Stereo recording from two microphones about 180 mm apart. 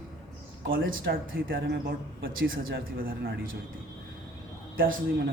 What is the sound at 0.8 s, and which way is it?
Speech, 75° right (ahead or behind).